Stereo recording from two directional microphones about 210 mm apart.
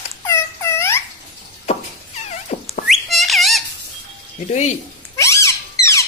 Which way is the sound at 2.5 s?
30° left (ahead or behind).